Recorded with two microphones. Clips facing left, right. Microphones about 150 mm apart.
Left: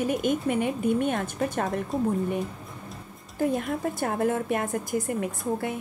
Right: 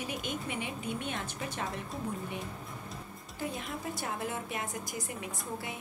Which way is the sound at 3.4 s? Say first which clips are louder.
Left 12 dB; 50° left (ahead or behind).